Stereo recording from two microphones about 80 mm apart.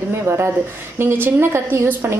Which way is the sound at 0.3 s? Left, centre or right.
Right.